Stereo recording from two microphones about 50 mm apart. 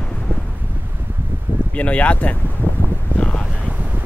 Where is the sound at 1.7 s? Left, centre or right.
Left.